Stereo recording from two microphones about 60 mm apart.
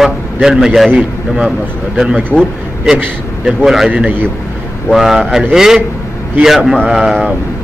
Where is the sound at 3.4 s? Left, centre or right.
Centre.